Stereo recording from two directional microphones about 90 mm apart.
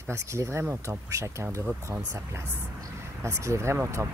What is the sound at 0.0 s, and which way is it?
Speech, 35° right (ahead or behind).